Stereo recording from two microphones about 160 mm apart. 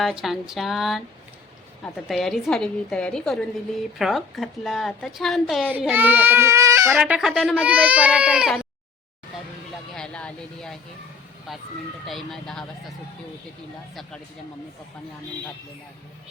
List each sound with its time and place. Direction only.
0.0 s a woman's voice: 5° right (ahead or behind)
2.0 s a woman's voice: centre (ahead or behind)
5.7 s speech: 10° right (ahead or behind)
7.0 s speech: 5° right (ahead or behind)
9.9 s a sound: 5° left (ahead or behind)
12.0 s a woman's voice: centre (ahead or behind)